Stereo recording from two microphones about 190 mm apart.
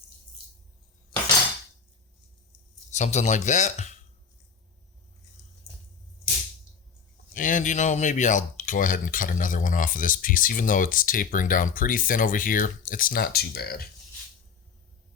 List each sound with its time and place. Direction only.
2.9 s speech: 35° left (ahead or behind)
5.7 s a sound: centre (ahead or behind)
7.3 s speech: 45° left (ahead or behind)